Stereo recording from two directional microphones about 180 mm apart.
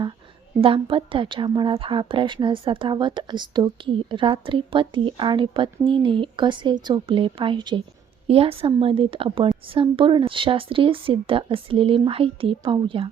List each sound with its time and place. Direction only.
0.6 s a woman's voice: 30° right (ahead or behind)